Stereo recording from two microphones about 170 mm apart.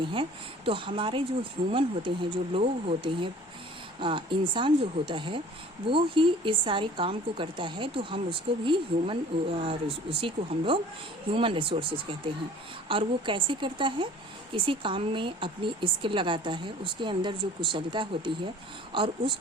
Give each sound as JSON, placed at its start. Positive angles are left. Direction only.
{"t": 0.1, "sound": "speech", "side_deg": -30}